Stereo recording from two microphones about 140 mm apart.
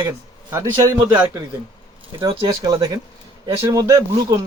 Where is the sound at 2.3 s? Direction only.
35° right (ahead or behind).